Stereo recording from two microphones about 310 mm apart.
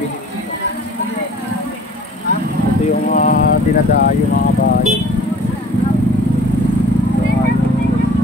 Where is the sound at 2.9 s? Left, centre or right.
Left.